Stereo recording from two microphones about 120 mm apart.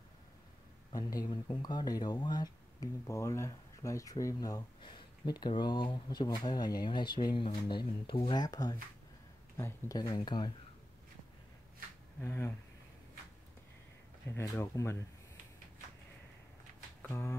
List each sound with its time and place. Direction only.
0.9 s speech: 30° left (ahead or behind)
9.6 s speech: 20° left (ahead or behind)
9.9 s speech: 30° left (ahead or behind)
12.2 s speech: 20° left (ahead or behind)
14.3 s speech: 25° left (ahead or behind)
17.0 s speech: 20° left (ahead or behind)